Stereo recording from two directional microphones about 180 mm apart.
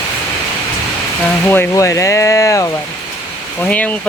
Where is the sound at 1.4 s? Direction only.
10° left (ahead or behind).